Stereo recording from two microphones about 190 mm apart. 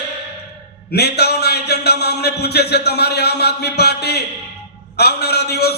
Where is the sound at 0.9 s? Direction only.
60° left (ahead or behind).